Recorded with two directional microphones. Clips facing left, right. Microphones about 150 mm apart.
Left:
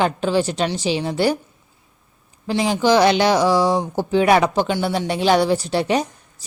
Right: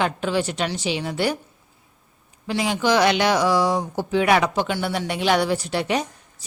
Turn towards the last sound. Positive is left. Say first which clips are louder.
# left 4 dB
turn(degrees=35)  # may be behind; listen again after turning